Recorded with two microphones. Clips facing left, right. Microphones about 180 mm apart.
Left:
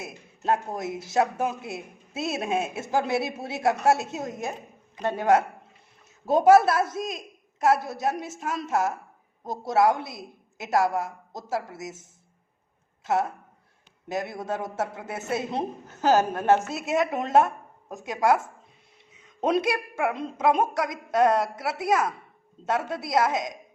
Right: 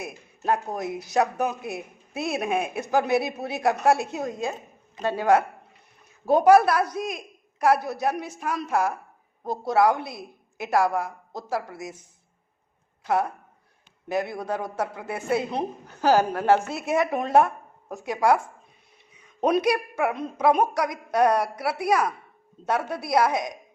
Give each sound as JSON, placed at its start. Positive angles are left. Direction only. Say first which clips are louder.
{"t": 0.0, "sound": "speech", "louder": "right 1 dB", "side_deg": 25}
{"t": 13.1, "sound": "speech", "louder": "right 1 dB", "side_deg": 25}
{"t": 19.5, "sound": "speech", "louder": "right 2 dB", "side_deg": 25}